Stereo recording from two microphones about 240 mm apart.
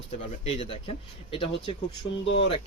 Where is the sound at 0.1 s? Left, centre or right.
Left.